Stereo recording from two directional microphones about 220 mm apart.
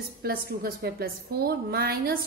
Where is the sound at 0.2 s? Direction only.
45° right (ahead or behind).